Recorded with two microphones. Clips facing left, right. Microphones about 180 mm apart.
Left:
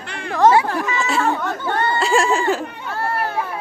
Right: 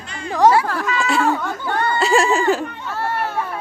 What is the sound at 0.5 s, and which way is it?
Speech, 20° left (ahead or behind).